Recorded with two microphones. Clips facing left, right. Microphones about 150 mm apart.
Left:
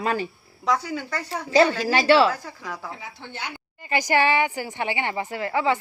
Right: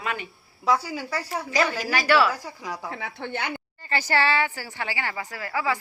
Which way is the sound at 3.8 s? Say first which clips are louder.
Left 3 dB; 15° left (ahead or behind).